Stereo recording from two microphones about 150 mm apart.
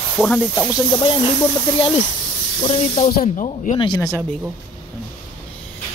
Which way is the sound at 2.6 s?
45° left (ahead or behind).